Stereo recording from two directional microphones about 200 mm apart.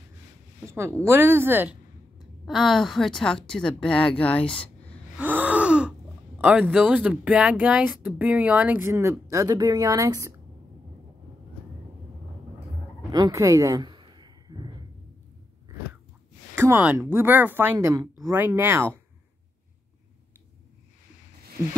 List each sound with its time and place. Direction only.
0.6 s a woman's voice: 15° right (ahead or behind); by 4.6 s 5° left (ahead or behind)
5.2 s speech: 10° right (ahead or behind)
13.1 s a sound: 20° right (ahead or behind)
16.5 s speech: 10° right (ahead or behind)